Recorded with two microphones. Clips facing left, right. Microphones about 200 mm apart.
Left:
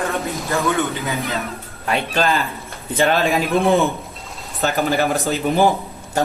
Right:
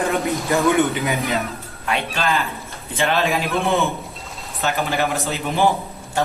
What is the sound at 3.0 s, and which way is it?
Speech, 35° left (ahead or behind).